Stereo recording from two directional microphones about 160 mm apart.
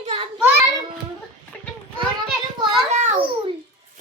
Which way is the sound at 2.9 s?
50° right (ahead or behind).